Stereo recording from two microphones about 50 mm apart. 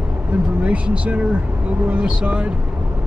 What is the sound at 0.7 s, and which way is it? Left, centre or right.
Speech, right.